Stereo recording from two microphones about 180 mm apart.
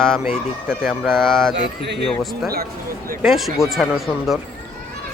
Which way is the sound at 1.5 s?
75° right (ahead or behind).